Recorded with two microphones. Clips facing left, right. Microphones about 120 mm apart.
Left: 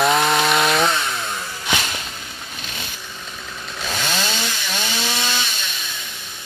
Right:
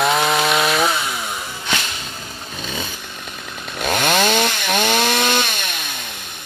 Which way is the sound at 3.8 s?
60° right (ahead or behind).